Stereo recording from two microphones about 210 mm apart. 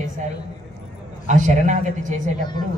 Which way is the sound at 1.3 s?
35° right (ahead or behind).